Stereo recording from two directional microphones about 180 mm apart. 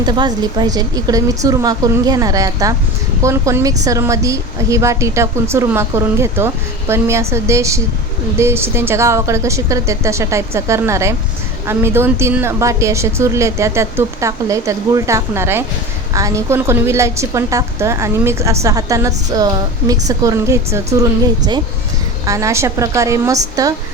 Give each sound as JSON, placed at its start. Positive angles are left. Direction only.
{"t": 0.0, "sound": "a woman's voice", "side_deg": -25}